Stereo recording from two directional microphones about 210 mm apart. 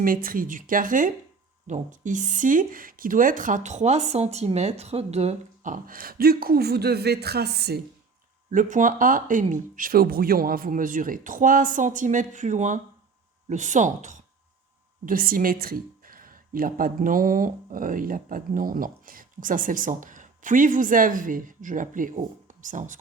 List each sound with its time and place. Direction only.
0.0 s speech: 40° right (ahead or behind)
8.4 s speech: 40° right (ahead or behind)